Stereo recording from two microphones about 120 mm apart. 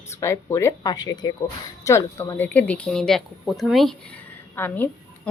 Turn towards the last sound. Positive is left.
turn(degrees=15)  # may be behind; listen again after turning